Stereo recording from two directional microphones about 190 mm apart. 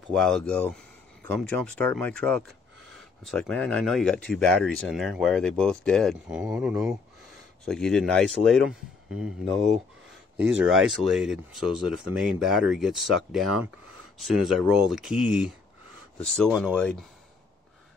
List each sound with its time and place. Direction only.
0.1 s speech: centre (ahead or behind)
10.7 s speech: centre (ahead or behind)